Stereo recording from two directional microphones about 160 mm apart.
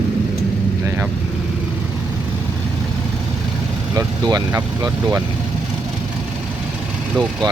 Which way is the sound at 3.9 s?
20° right (ahead or behind).